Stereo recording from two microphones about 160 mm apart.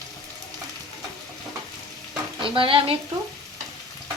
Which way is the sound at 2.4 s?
35° right (ahead or behind).